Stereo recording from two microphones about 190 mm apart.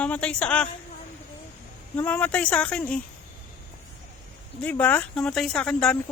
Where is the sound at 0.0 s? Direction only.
5° left (ahead or behind).